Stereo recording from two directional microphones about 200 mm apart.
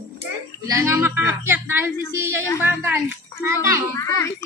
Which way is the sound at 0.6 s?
15° right (ahead or behind).